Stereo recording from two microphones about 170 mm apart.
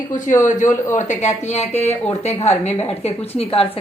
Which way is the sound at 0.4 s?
45° left (ahead or behind).